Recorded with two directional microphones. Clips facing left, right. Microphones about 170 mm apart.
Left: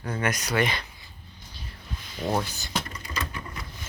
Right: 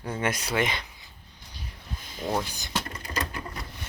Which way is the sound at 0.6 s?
20° right (ahead or behind).